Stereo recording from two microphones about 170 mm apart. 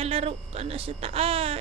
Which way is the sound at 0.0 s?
35° right (ahead or behind).